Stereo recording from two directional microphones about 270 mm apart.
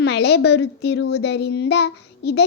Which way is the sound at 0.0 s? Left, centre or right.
Left.